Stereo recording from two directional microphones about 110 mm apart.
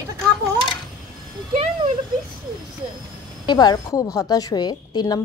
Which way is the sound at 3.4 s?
40° left (ahead or behind).